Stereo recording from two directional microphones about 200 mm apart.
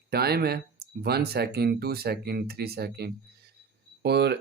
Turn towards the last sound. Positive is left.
turn(degrees=-55)  # may be behind; listen again after turning